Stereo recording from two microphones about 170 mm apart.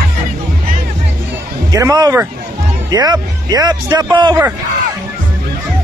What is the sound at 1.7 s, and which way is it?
Speech, 20° right (ahead or behind).